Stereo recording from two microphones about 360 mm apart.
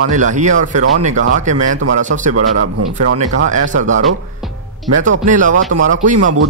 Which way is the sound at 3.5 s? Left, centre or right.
Right.